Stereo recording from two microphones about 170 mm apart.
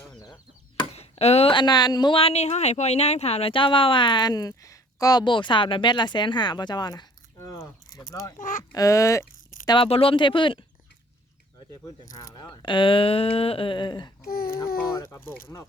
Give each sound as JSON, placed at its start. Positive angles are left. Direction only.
{"t": 0.8, "sound": "speech", "side_deg": 35}
{"t": 8.4, "sound": "speech", "side_deg": 50}
{"t": 8.7, "sound": "speech", "side_deg": 20}
{"t": 9.6, "sound": "speech", "side_deg": 30}
{"t": 12.1, "sound": "speech", "side_deg": 25}
{"t": 14.3, "sound": "a sound", "side_deg": 60}
{"t": 14.9, "sound": "speech", "side_deg": 15}